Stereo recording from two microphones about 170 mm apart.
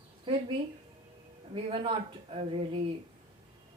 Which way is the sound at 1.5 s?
30° right (ahead or behind).